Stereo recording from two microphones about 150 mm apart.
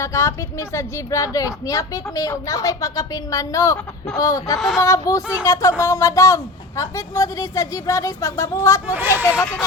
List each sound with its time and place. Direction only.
0.0 s a woman's voice: 20° left (ahead or behind)
4.5 s speech: centre (ahead or behind)
4.8 s a woman's voice: 20° left (ahead or behind)
8.9 s speech: 15° right (ahead or behind)